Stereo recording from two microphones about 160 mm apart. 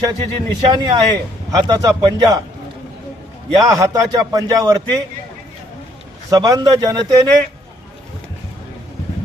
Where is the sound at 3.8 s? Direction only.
20° right (ahead or behind).